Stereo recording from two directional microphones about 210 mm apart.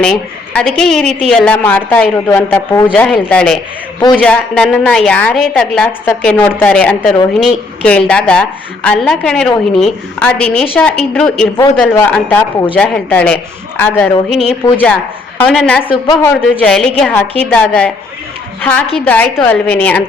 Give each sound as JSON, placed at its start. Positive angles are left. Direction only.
{"t": 0.0, "sound": "a woman's voice", "side_deg": 5}
{"t": 15.8, "sound": "a woman's voice", "side_deg": 25}
{"t": 16.3, "sound": "a woman's voice", "side_deg": 5}